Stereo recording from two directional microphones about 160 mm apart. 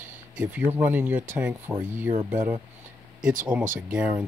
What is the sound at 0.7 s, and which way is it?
Speech, 10° right (ahead or behind).